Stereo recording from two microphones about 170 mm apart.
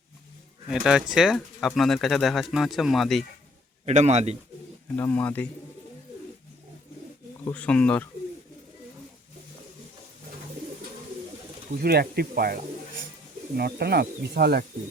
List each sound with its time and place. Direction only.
0.7 s speech: 5° right (ahead or behind)
3.8 s a man's voice: 40° right (ahead or behind)
4.9 s speech: 10° left (ahead or behind)
7.4 s speech: 10° left (ahead or behind)
11.8 s speech: 70° right (ahead or behind)